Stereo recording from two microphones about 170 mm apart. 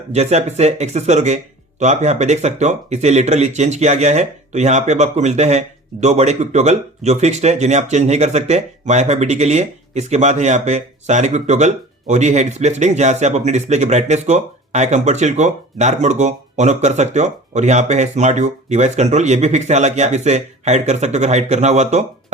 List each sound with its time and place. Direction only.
0.1 s speech: 40° right (ahead or behind)